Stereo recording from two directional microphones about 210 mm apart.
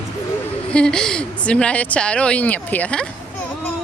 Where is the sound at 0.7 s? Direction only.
5° left (ahead or behind).